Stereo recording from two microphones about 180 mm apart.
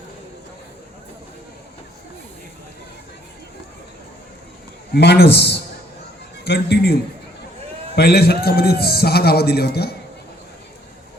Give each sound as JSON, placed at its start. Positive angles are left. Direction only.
{"t": 4.9, "sound": "a man's voice", "side_deg": 65}